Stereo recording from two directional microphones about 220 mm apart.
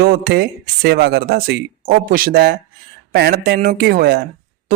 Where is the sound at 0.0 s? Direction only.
45° right (ahead or behind).